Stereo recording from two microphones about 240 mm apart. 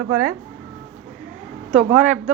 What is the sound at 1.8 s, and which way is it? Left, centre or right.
Speech, right.